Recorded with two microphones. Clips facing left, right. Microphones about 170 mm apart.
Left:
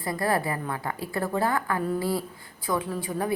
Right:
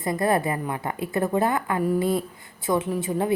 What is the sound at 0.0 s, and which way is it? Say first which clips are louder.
A woman's voice: right 4 dB; 20° right (ahead or behind).